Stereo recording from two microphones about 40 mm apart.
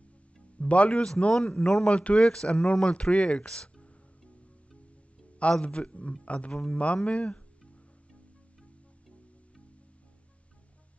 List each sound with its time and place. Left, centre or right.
0.6 s speech: left
0.9 s a man's voice: centre
5.4 s a man's voice: left